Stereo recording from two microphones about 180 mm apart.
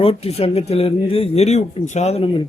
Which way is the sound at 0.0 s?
35° left (ahead or behind).